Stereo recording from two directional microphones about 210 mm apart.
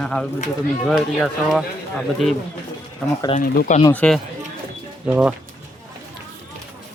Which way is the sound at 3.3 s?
40° left (ahead or behind).